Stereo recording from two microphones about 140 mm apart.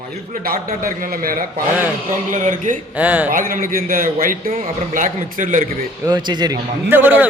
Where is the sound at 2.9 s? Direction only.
10° right (ahead or behind).